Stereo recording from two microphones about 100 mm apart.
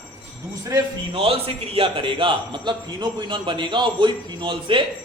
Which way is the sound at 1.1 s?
70° right (ahead or behind).